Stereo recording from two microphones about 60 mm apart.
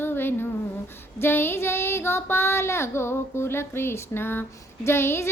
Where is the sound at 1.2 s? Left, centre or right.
Left.